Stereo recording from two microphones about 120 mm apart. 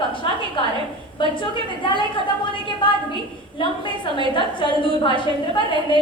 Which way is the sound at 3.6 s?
45° left (ahead or behind).